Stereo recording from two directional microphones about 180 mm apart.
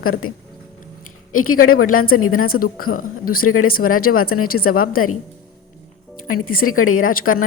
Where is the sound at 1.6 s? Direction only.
55° left (ahead or behind).